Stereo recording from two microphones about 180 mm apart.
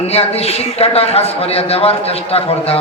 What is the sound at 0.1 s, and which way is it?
A man's voice, 35° left (ahead or behind).